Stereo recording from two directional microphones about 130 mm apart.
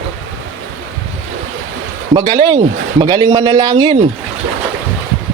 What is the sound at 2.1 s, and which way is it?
A man's voice, 40° right (ahead or behind).